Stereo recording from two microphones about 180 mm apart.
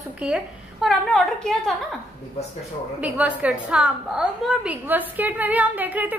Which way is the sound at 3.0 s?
10° right (ahead or behind).